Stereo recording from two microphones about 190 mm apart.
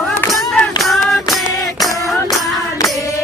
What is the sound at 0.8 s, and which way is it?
Music, centre (ahead or behind).